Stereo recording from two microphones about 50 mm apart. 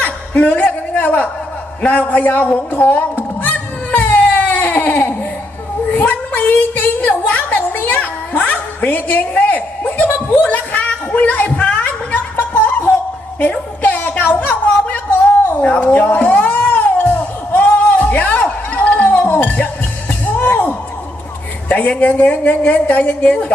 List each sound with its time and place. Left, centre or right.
0.0 s chuckle: left
1.8 s a man's voice: left
3.9 s baby cry: left
5.9 s a sound: left
15.6 s cat: left
19.3 s music: left
21.7 s a woman's voice: left